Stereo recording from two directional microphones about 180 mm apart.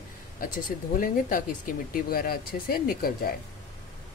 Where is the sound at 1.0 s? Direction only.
50° left (ahead or behind).